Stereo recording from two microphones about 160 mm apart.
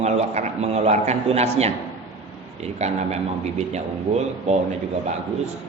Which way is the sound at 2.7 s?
45° right (ahead or behind).